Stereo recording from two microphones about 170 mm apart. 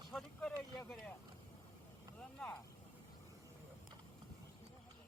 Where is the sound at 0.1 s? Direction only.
5° left (ahead or behind).